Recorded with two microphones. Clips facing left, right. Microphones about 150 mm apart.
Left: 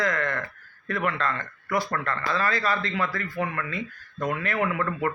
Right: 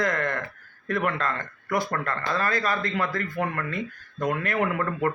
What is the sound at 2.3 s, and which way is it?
A man's voice, 45° right (ahead or behind).